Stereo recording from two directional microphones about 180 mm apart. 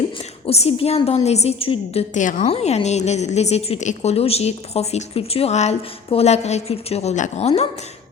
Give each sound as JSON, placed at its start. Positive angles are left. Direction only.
{"t": 0.2, "sound": "a woman's voice", "side_deg": 35}